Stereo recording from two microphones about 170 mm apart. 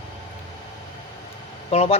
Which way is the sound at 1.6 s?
35° left (ahead or behind).